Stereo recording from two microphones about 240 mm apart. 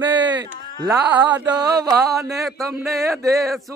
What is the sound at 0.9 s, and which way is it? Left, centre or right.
Speech, centre.